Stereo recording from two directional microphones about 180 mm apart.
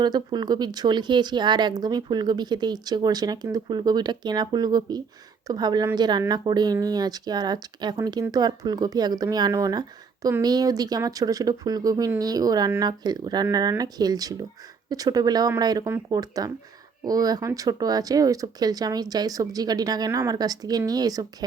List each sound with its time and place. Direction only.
0.0 s speech: 25° right (ahead or behind)